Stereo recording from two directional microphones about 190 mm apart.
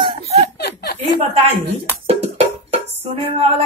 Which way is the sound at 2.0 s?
35° right (ahead or behind).